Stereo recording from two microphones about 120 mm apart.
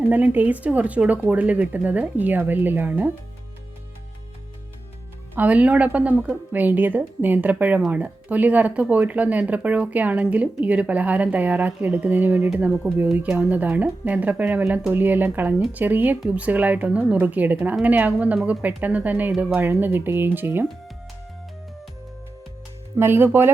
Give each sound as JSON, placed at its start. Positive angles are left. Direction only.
{"t": 0.1, "sound": "speech", "side_deg": -15}
{"t": 5.3, "sound": "speech", "side_deg": -15}
{"t": 23.0, "sound": "speech", "side_deg": -20}